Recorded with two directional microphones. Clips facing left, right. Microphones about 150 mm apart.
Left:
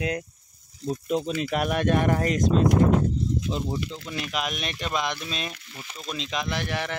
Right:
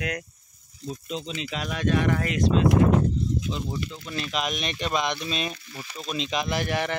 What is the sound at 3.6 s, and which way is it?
Speech, 25° left (ahead or behind).